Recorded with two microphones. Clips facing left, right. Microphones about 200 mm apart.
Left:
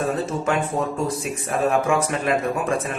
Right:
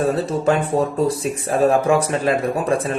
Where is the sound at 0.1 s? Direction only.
35° right (ahead or behind).